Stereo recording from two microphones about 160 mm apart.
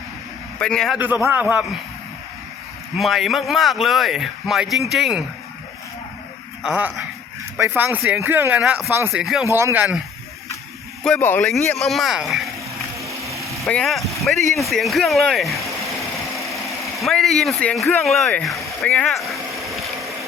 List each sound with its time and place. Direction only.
0.6 s speech: 5° left (ahead or behind)
1.2 s speech: 10° right (ahead or behind)
3.0 s speech: centre (ahead or behind)
6.6 s speech: 5° right (ahead or behind)
9.2 s speech: 5° right (ahead or behind)
9.5 s speech: 15° right (ahead or behind)
11.0 s speech: 10° left (ahead or behind)
13.0 s vehicle: 20° right (ahead or behind)
13.4 s vehicle: 5° left (ahead or behind)
16.5 s speech: centre (ahead or behind)
18.8 s a sound: 5° left (ahead or behind)